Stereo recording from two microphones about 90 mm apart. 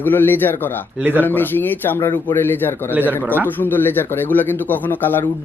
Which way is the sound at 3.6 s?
20° left (ahead or behind).